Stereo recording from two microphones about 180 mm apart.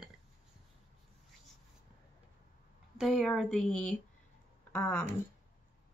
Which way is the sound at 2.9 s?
Centre (ahead or behind).